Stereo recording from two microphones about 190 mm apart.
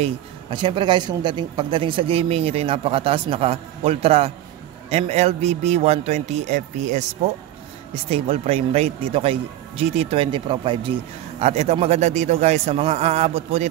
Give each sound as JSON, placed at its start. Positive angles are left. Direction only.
{"t": 0.0, "sound": "speech", "side_deg": -25}